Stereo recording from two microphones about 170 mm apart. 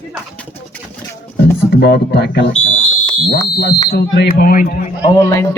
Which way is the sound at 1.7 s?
75° left (ahead or behind).